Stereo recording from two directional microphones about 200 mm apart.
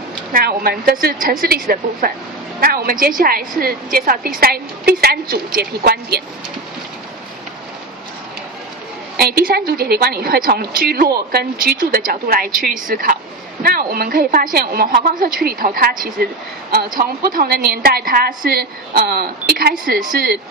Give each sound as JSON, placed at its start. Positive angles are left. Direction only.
{"t": 0.3, "sound": "a woman's voice", "side_deg": -45}
{"t": 9.1, "sound": "a woman's voice", "side_deg": -50}